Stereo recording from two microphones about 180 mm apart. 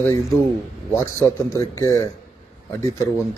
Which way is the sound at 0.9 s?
15° left (ahead or behind).